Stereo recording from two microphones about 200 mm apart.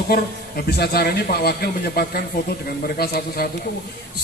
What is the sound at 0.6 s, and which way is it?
A man's voice, 50° left (ahead or behind).